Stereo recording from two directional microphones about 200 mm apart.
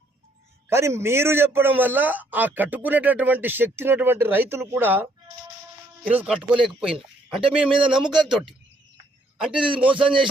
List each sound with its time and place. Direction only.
0.7 s a man's voice: 15° right (ahead or behind)
6.1 s speech: 5° right (ahead or behind)
9.6 s a man's voice: 25° right (ahead or behind)